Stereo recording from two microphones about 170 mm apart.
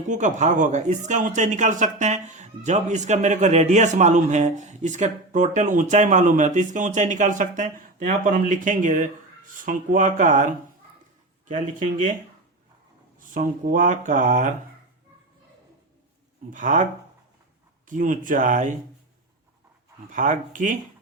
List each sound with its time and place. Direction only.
0.1 s a man's voice: 45° right (ahead or behind)
13.1 s a man's voice: 55° right (ahead or behind)
16.5 s a man's voice: 50° right (ahead or behind)
17.8 s a man's voice: 50° right (ahead or behind)
20.1 s a man's voice: 50° right (ahead or behind)